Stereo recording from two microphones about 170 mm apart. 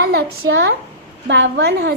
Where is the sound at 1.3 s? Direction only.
90° right.